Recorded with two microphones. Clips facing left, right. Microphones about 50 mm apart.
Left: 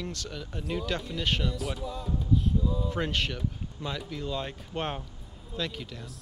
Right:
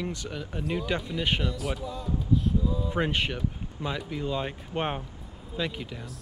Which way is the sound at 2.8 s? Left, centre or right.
Centre.